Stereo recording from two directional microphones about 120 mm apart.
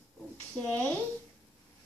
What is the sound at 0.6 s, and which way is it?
Speech, 15° left (ahead or behind).